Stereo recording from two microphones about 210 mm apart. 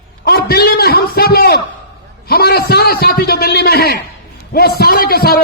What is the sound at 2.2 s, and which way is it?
A man's voice, 45° left (ahead or behind).